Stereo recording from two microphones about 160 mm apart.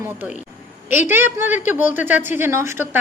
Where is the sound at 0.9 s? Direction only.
15° right (ahead or behind).